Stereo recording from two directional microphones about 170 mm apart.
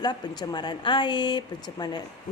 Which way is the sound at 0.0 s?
25° left (ahead or behind).